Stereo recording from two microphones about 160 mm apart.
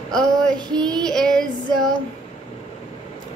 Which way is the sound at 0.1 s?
5° left (ahead or behind).